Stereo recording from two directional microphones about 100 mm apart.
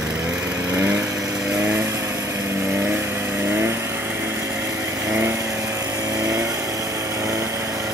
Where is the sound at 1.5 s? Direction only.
25° right (ahead or behind).